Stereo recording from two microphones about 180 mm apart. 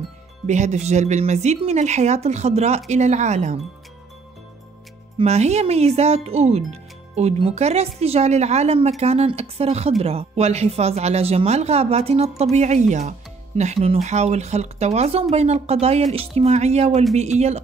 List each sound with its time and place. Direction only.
0.5 s speech: 40° right (ahead or behind)
5.2 s speech: 35° right (ahead or behind)